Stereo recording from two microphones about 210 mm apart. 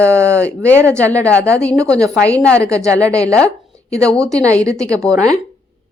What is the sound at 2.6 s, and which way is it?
Speech, 15° right (ahead or behind).